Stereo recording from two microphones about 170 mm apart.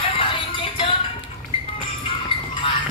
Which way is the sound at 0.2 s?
30° left (ahead or behind).